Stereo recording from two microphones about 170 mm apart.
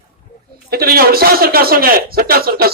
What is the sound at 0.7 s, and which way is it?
A man's voice, 65° right (ahead or behind).